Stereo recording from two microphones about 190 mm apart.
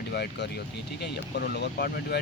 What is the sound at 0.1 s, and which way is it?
Speech, 60° left (ahead or behind).